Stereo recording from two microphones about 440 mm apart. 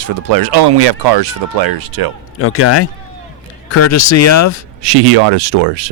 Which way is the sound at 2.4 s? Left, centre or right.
Left.